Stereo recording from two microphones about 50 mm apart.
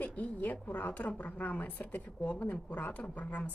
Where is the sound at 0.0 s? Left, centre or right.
Left.